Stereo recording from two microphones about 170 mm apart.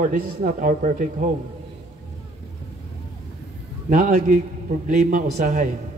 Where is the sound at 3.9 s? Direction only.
55° right (ahead or behind).